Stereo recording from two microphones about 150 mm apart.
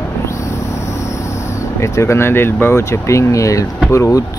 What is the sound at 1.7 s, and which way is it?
Speech, 20° left (ahead or behind).